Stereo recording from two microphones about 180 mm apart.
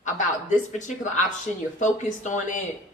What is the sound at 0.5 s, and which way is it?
Speech, 40° left (ahead or behind).